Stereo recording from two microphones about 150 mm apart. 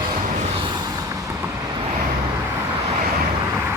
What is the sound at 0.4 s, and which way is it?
Vehicle, 35° right (ahead or behind).